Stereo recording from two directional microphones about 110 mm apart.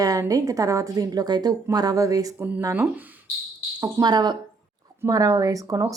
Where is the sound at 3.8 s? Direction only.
35° right (ahead or behind).